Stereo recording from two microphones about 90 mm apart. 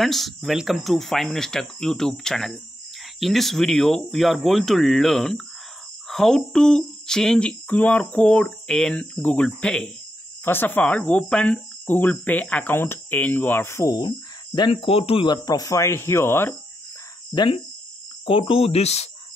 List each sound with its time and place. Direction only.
0.0 s speech: centre (ahead or behind)
10.4 s speech: 25° left (ahead or behind)
13.9 s speech: 60° left (ahead or behind); by 15.2 s 90° left
15.3 s speech: 40° left (ahead or behind)
17.3 s speech: 55° left (ahead or behind)
18.2 s speech: 85° left